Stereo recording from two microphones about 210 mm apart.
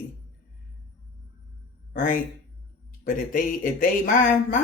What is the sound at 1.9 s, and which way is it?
A man's voice, 40° left (ahead or behind).